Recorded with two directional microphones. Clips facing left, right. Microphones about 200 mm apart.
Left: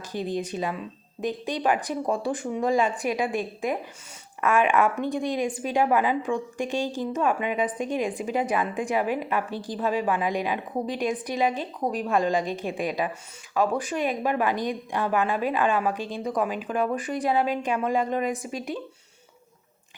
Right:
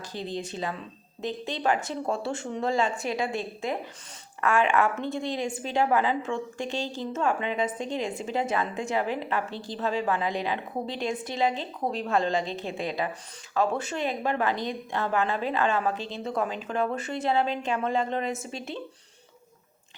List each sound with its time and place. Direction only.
0.1 s a woman's voice: 15° left (ahead or behind)